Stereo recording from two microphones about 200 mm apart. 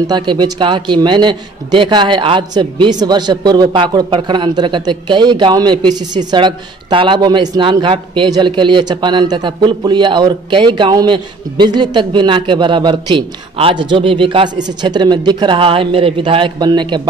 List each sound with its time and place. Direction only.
0.0 s a man's voice: 20° right (ahead or behind)